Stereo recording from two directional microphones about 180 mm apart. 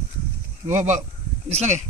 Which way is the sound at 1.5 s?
40° right (ahead or behind).